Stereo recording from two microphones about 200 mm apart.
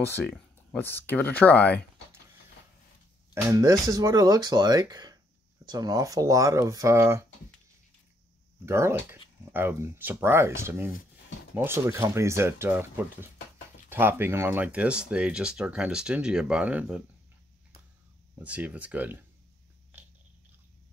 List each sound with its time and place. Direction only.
0.0 s speech: 10° left (ahead or behind)
3.3 s speech: 15° right (ahead or behind)
8.6 s speech: 15° right (ahead or behind)
18.4 s speech: 5° right (ahead or behind)